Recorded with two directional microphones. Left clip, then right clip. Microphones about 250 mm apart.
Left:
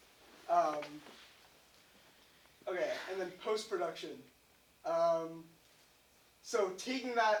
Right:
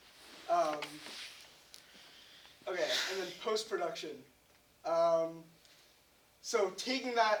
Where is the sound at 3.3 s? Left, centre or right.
Centre.